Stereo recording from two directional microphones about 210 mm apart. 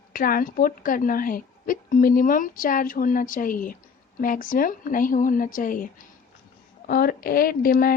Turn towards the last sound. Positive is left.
turn(degrees=45)  # may be behind; listen again after turning